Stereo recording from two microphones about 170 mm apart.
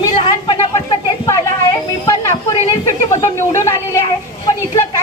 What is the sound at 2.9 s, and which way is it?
Speech, 15° left (ahead or behind).